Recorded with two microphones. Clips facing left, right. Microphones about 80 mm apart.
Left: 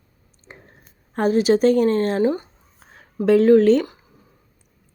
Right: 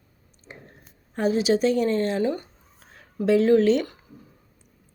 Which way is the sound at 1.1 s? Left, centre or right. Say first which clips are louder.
Left 4 dB; left.